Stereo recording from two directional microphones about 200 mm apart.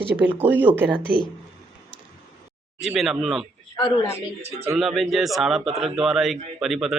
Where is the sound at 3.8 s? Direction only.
20° left (ahead or behind).